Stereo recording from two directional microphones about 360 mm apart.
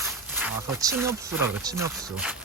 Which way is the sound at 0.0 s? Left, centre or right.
Centre.